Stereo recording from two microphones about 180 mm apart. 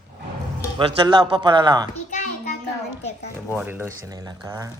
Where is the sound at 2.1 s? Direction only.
45° left (ahead or behind).